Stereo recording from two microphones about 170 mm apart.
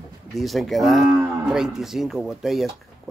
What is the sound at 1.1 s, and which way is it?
Cattle, 15° right (ahead or behind).